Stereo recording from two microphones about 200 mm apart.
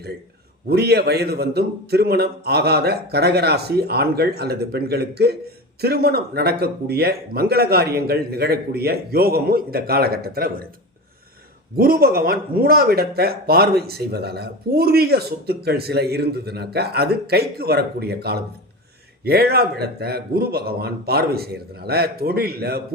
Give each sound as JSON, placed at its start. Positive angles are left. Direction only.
{"t": 0.7, "sound": "speech", "side_deg": -55}
{"t": 11.8, "sound": "speech", "side_deg": -50}